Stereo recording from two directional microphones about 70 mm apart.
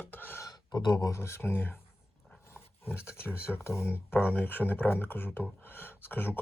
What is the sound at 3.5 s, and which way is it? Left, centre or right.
Speech, left.